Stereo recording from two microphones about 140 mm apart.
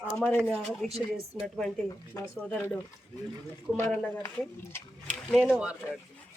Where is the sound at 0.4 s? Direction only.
5° left (ahead or behind).